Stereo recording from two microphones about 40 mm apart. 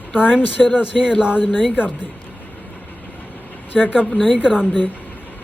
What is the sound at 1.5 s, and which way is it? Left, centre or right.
Speech, left.